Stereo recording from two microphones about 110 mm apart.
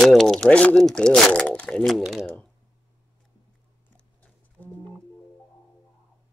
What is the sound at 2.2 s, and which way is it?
Speech, 20° left (ahead or behind).